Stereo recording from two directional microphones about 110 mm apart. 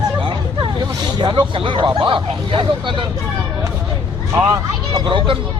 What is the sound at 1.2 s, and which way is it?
Speech, 45° right (ahead or behind).